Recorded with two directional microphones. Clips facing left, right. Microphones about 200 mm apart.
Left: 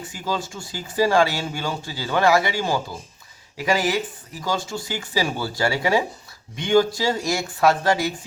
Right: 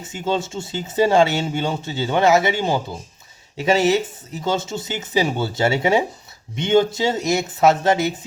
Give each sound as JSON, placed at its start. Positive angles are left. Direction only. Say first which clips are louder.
{"t": 0.0, "sound": "speech", "louder": "right 4 dB", "side_deg": -25}